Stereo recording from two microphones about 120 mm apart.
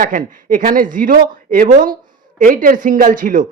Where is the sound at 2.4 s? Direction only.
90° right.